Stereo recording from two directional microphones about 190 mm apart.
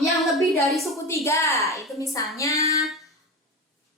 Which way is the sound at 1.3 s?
15° left (ahead or behind).